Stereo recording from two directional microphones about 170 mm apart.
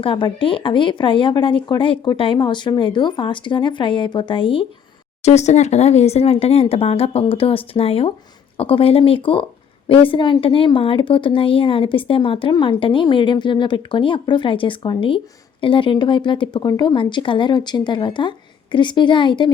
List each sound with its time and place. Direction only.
0.0 s speech: 30° left (ahead or behind)
5.2 s a woman's voice: 40° left (ahead or behind)